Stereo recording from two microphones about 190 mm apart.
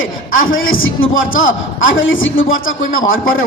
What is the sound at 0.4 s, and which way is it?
A man's voice, 90° left.